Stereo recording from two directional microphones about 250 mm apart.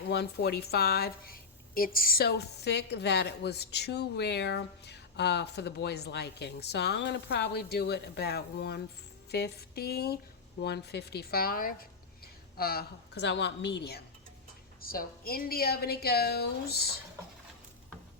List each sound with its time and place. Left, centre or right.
0.1 s a woman's voice: left